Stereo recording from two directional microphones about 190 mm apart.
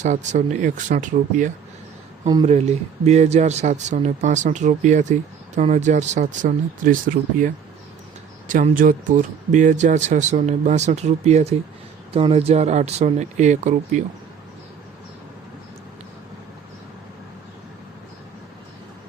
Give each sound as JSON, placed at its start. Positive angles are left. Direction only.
{"t": 0.0, "sound": "speech", "side_deg": -40}
{"t": 2.2, "sound": "speech", "side_deg": -20}
{"t": 2.5, "sound": "speech", "side_deg": -35}